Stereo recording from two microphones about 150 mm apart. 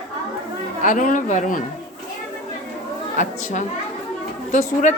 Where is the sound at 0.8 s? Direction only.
60° left (ahead or behind).